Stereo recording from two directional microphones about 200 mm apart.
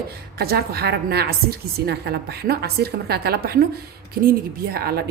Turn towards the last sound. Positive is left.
turn(degrees=-50)  # may be behind; listen again after turning